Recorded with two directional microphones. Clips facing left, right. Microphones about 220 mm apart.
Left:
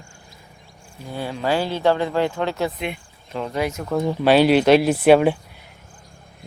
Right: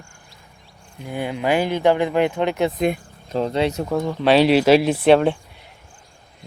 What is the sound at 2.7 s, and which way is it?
Speech, 40° right (ahead or behind).